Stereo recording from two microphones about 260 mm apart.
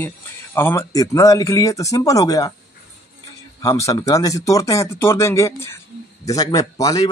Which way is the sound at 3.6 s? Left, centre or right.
Centre.